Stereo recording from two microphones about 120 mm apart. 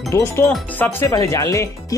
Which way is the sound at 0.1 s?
20° left (ahead or behind).